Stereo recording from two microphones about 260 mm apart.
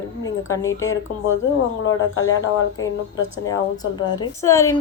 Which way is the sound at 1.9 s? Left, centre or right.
Left.